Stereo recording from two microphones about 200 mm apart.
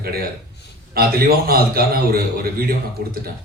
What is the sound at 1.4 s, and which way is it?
A man's voice, 50° right (ahead or behind).